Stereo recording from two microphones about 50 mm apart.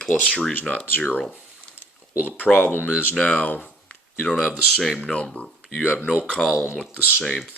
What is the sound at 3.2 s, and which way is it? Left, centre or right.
Speech, left.